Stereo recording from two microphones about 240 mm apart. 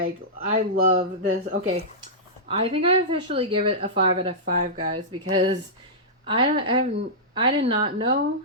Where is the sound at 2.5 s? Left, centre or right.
Right.